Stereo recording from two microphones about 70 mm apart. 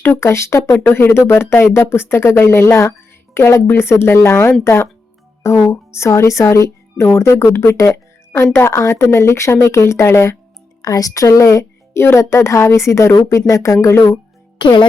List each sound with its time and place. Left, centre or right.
0.0 s a woman's voice: left
10.8 s speech: left